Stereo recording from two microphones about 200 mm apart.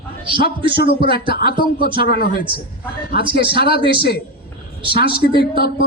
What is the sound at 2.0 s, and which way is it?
Speech, 50° left (ahead or behind).